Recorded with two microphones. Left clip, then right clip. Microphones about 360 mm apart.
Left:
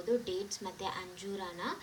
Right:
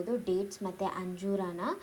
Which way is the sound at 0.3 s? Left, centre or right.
Centre.